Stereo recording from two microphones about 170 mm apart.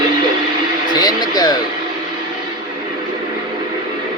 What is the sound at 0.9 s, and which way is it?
Speech, 25° left (ahead or behind).